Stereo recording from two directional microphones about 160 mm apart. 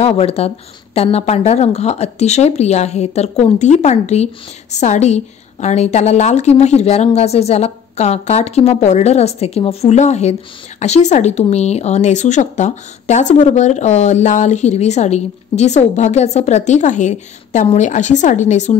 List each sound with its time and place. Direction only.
0.0 s speech: 40° left (ahead or behind)